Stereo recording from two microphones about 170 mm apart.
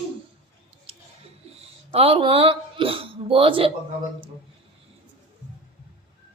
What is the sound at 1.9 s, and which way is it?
Speech, 35° right (ahead or behind).